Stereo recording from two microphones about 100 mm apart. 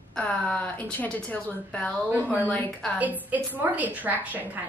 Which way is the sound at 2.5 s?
15° left (ahead or behind).